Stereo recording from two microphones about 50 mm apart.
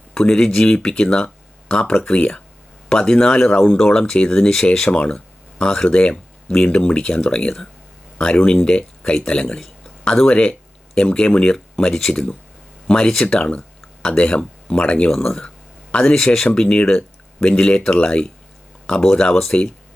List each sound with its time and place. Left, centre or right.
0.1 s speech: centre
13.3 s speech: left